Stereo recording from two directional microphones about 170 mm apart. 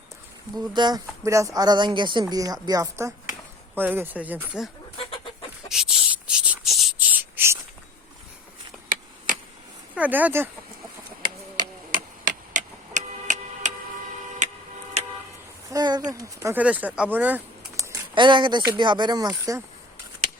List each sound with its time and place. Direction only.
0.5 s speech: 25° right (ahead or behind)
3.8 s speech: 10° right (ahead or behind)
5.6 s a sound: centre (ahead or behind)
8.9 s a sound: 50° right (ahead or behind)
9.9 s speech: 10° right (ahead or behind)
11.9 s tick-tock: 50° right (ahead or behind)
15.0 s vehicle: 40° right (ahead or behind)
15.7 s speech: 25° right (ahead or behind)
18.1 s speech: 30° right (ahead or behind)